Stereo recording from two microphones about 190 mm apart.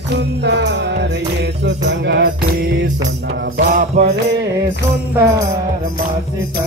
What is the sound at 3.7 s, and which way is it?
Music, 45° right (ahead or behind).